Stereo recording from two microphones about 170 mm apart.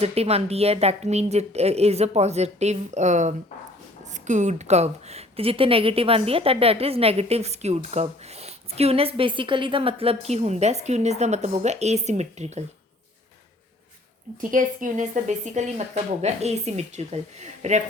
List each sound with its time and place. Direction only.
0.0 s speech: 35° right (ahead or behind)
14.5 s a woman's voice: 50° right (ahead or behind)